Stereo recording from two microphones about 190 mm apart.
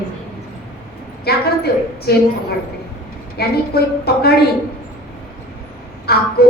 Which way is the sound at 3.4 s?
55° left (ahead or behind).